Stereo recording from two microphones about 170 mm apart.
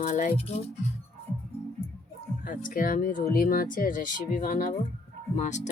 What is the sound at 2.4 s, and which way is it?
Speech, 55° left (ahead or behind).